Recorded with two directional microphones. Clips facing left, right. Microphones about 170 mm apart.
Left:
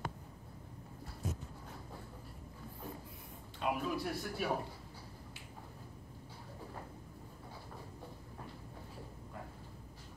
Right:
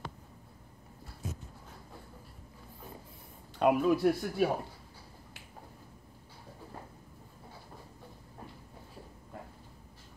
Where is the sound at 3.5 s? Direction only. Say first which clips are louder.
Right 10 dB; 60° right (ahead or behind).